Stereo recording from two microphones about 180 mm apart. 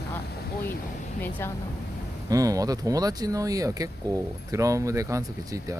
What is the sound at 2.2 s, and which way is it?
Speech, 20° right (ahead or behind).